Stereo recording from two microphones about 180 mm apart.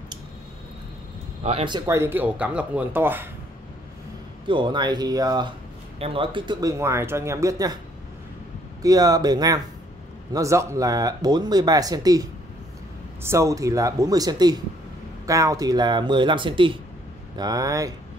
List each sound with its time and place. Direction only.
1.4 s speech: 30° right (ahead or behind)
1.9 s speech: 15° right (ahead or behind)
4.5 s speech: 25° right (ahead or behind)
8.8 s speech: 20° right (ahead or behind)